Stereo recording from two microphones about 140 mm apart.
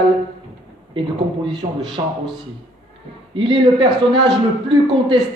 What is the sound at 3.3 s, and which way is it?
A man's voice, 35° right (ahead or behind).